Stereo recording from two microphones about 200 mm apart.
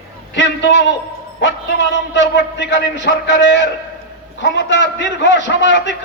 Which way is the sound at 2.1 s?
60° left (ahead or behind).